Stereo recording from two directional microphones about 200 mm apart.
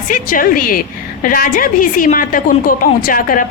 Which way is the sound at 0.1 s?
45° left (ahead or behind).